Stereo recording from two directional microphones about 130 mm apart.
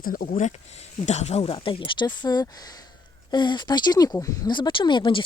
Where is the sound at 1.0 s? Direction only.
60° left (ahead or behind); by 4.5 s 25° left (ahead or behind).